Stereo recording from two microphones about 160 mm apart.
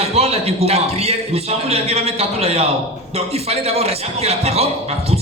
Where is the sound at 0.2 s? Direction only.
40° right (ahead or behind).